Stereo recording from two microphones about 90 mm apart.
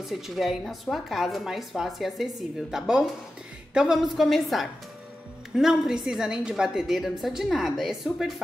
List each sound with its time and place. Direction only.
0.0 s a woman's voice: 5° right (ahead or behind)